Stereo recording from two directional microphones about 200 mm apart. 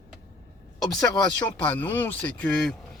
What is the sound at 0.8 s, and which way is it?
Speech, 20° left (ahead or behind).